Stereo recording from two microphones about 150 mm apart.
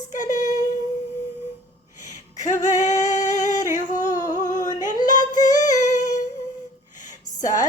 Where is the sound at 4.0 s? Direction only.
55° left (ahead or behind).